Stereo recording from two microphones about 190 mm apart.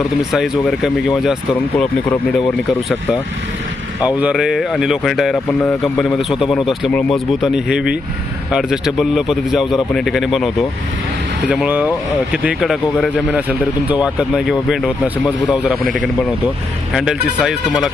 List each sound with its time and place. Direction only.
0.2 s speech: centre (ahead or behind)
4.0 s speech: 5° right (ahead or behind)
16.9 s speech: centre (ahead or behind)